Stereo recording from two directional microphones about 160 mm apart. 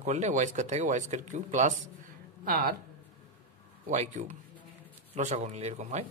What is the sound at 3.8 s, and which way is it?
Speech, 45° right (ahead or behind).